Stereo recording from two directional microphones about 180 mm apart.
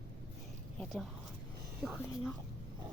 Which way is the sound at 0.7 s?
Centre (ahead or behind).